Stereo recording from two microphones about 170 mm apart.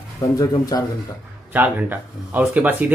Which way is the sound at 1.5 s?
10° right (ahead or behind).